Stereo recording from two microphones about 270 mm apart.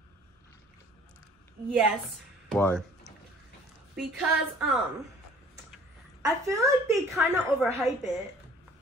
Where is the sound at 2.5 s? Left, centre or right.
Centre.